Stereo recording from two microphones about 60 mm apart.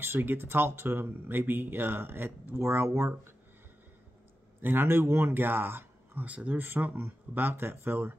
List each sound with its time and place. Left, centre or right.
0.0 s speech: right
2.6 s speech: right
4.6 s speech: right
6.2 s speech: right
6.6 s speech: right